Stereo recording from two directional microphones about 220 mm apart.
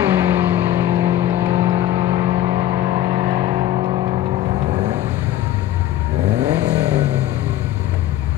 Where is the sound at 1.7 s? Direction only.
30° right (ahead or behind).